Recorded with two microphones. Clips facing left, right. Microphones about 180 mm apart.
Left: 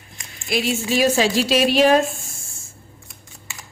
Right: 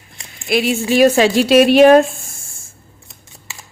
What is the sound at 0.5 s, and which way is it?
A woman's voice, 60° right (ahead or behind).